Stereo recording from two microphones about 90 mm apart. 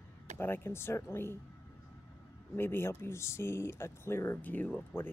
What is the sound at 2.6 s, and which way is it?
Speech, 25° left (ahead or behind).